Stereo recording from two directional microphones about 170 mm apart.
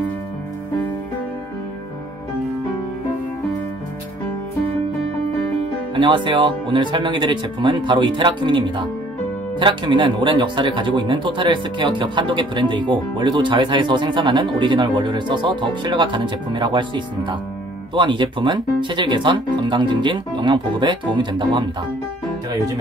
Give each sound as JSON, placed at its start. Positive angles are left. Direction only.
{"t": 5.9, "sound": "speech", "side_deg": -30}